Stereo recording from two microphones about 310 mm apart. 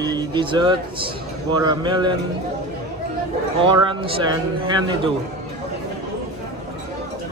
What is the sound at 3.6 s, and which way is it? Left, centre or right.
Speech, centre.